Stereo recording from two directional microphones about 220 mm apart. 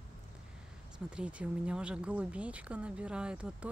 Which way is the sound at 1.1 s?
5° right (ahead or behind).